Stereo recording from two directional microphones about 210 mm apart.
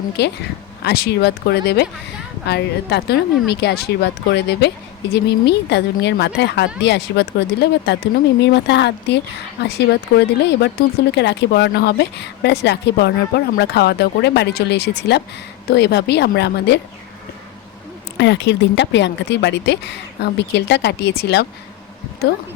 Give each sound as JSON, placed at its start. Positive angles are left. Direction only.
{"t": 0.2, "sound": "a woman's voice", "side_deg": 55}
{"t": 18.2, "sound": "speech", "side_deg": 55}